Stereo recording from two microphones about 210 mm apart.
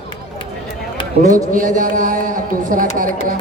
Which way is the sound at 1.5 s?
40° right (ahead or behind).